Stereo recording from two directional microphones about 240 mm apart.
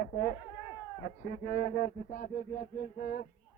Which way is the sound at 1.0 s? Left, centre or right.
Left.